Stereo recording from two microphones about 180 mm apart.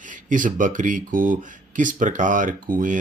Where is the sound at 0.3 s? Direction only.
45° right (ahead or behind).